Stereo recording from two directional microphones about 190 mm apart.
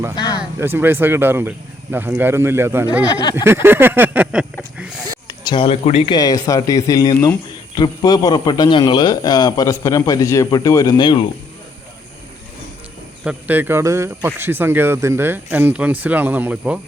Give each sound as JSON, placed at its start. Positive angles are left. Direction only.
{"t": 0.3, "sound": "speech", "side_deg": -10}
{"t": 3.2, "sound": "a man's voice", "side_deg": 25}
{"t": 3.4, "sound": "speech", "side_deg": -10}
{"t": 5.3, "sound": "speech", "side_deg": 20}
{"t": 6.1, "sound": "a man's voice", "side_deg": 20}
{"t": 13.2, "sound": "speech", "side_deg": -10}